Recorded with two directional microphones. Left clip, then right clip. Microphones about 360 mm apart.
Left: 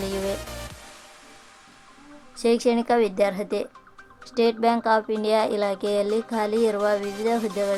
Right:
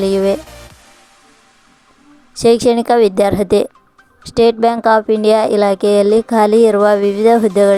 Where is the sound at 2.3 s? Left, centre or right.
Right.